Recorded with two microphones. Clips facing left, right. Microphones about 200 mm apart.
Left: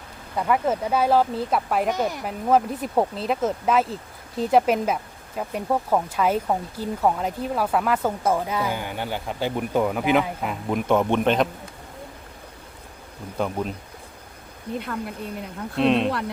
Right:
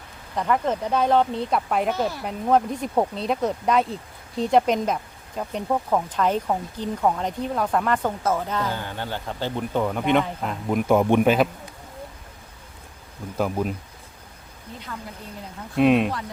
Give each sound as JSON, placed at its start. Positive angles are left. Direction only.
{"t": 0.3, "sound": "speech", "side_deg": 5}
{"t": 1.9, "sound": "speech", "side_deg": 15}
{"t": 2.2, "sound": "speech", "side_deg": 5}
{"t": 13.4, "sound": "speech", "side_deg": -5}
{"t": 15.7, "sound": "speech", "side_deg": -10}